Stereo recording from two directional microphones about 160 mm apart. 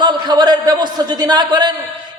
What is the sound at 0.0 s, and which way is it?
A man's voice, 25° right (ahead or behind).